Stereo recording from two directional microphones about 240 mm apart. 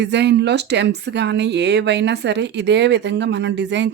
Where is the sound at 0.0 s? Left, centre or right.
Right.